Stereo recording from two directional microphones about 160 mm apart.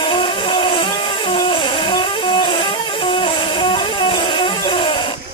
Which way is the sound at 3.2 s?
30° left (ahead or behind).